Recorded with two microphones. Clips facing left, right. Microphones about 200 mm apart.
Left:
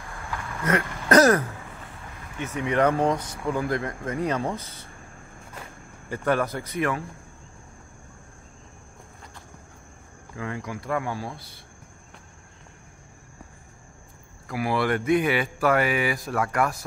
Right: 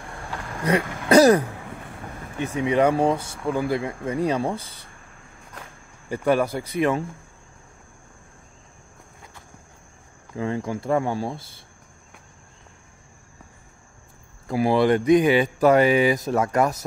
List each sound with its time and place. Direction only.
0.7 s speech: 10° right (ahead or behind)
2.6 s speech: 10° right (ahead or behind)
6.0 s speech: 10° right (ahead or behind)
6.7 s speech: 20° right (ahead or behind)
10.3 s speech: 25° right (ahead or behind)
14.5 s speech: 25° right (ahead or behind)